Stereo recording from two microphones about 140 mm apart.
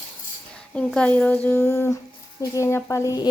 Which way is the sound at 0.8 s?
10° left (ahead or behind).